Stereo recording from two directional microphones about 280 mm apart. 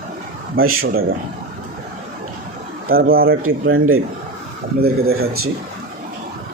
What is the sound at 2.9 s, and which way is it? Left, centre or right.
Speech, right.